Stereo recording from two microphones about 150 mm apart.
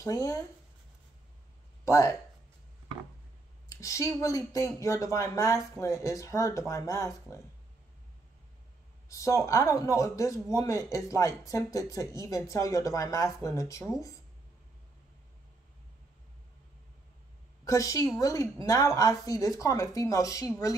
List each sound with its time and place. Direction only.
0.0 s speech: 20° left (ahead or behind)
1.9 s speech: 20° left (ahead or behind)
3.6 s speech: 20° left (ahead or behind)
9.1 s speech: 20° left (ahead or behind)
17.6 s speech: 20° left (ahead or behind)